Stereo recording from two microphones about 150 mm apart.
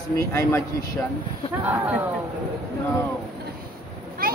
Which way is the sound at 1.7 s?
10° right (ahead or behind).